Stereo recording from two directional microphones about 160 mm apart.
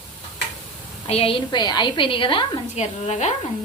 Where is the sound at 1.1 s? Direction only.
35° left (ahead or behind).